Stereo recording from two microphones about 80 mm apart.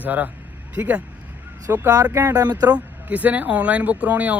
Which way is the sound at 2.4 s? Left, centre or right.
Right.